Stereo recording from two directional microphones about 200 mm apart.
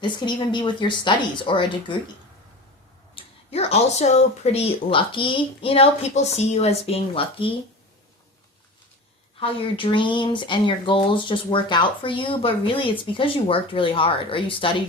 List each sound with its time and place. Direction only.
0.0 s speech: 25° left (ahead or behind)
3.2 s speech: 30° left (ahead or behind)
9.4 s speech: 25° left (ahead or behind)